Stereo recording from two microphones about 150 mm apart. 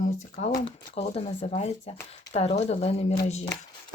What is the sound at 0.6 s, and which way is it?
Speech, 40° left (ahead or behind).